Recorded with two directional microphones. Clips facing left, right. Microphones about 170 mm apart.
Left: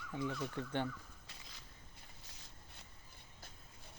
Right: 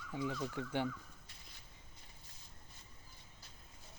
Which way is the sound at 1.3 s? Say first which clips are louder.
Left 3 dB; 90° left.